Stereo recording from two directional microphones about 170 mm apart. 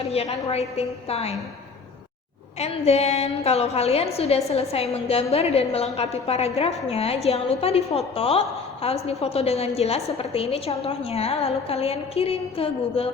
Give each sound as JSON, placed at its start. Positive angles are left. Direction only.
{"t": 0.1, "sound": "a woman's voice", "side_deg": 35}
{"t": 2.6, "sound": "a woman's voice", "side_deg": 40}